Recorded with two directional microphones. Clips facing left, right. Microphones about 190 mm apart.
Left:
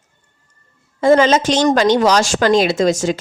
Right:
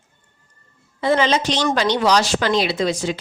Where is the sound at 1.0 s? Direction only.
45° left (ahead or behind).